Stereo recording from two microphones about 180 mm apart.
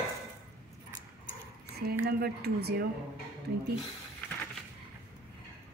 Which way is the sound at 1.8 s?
60° right (ahead or behind).